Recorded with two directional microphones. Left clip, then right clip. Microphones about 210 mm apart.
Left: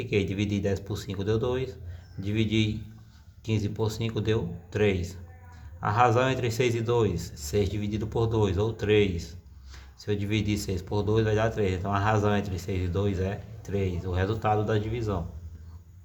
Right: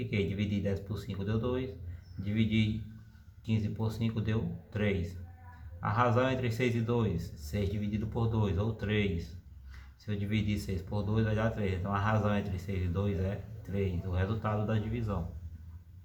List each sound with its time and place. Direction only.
0.1 s speech: 35° left (ahead or behind)